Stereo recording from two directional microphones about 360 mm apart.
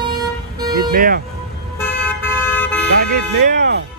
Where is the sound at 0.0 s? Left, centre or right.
Centre.